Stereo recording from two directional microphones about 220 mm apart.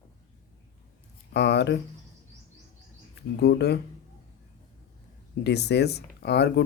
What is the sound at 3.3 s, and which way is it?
Speech, 50° left (ahead or behind).